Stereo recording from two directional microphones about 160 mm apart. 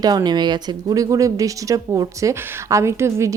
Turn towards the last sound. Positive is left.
turn(degrees=-15)  # may be behind; listen again after turning